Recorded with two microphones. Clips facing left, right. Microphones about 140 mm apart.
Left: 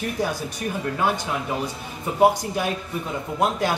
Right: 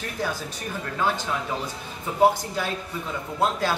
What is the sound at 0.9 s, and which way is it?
A man's voice, 15° left (ahead or behind).